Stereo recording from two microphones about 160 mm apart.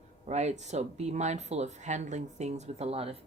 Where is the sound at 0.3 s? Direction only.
45° right (ahead or behind).